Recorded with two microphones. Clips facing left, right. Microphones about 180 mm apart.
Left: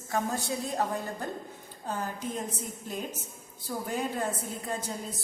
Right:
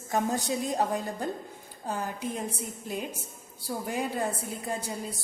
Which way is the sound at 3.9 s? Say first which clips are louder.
Right 1 dB; 10° right (ahead or behind).